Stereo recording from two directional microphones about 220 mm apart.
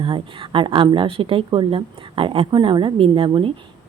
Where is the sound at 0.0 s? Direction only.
25° right (ahead or behind).